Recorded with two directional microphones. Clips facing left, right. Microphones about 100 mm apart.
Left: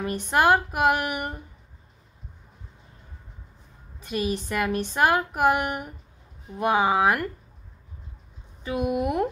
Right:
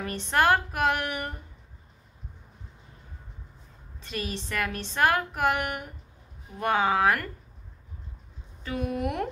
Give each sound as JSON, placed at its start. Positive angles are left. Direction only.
{"t": 0.0, "sound": "a woman's voice", "side_deg": 10}
{"t": 4.0, "sound": "a woman's voice", "side_deg": 15}
{"t": 8.6, "sound": "a woman's voice", "side_deg": 15}